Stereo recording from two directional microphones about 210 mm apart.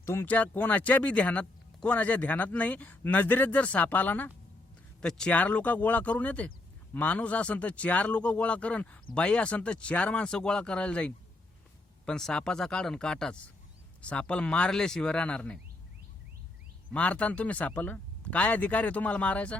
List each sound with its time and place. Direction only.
0.0 s speech: 10° left (ahead or behind)
16.9 s speech: 5° left (ahead or behind)